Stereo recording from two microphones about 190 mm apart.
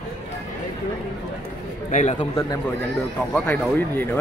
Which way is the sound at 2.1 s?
20° left (ahead or behind).